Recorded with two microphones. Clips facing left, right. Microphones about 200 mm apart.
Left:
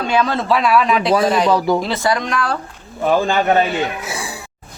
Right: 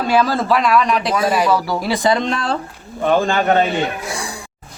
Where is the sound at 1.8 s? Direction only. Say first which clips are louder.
Right 2 dB; 15° right (ahead or behind).